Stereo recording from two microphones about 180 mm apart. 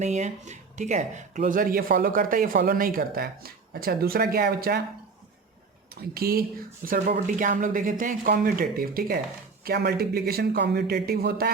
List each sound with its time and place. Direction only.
0.0 s speech: 40° right (ahead or behind); by 4.8 s 60° right (ahead or behind)
5.9 s speech: 55° right (ahead or behind)
7.1 s speech: 45° right (ahead or behind)